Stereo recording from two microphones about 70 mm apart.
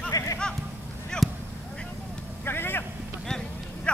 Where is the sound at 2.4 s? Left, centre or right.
Left.